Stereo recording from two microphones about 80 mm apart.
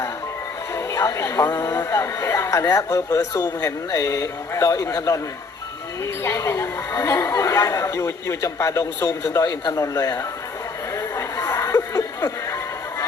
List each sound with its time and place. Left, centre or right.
0.9 s a man's voice: left
6.2 s a woman's voice: left
9.4 s a man's voice: left
10.9 s a sound: left
11.4 s music: left